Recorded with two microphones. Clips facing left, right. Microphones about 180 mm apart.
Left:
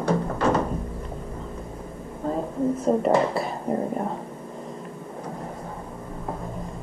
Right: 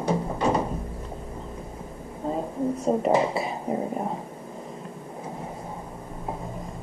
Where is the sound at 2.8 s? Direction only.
5° right (ahead or behind).